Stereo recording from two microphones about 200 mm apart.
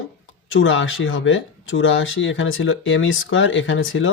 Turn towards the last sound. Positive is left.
turn(degrees=85)